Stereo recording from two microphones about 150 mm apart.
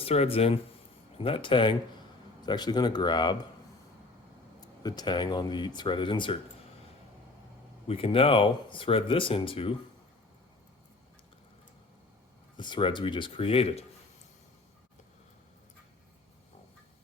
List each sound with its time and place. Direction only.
0.0 s speech: 40° left (ahead or behind)
4.6 s speech: 25° left (ahead or behind)
7.9 s speech: 40° left (ahead or behind)
12.5 s speech: 30° left (ahead or behind)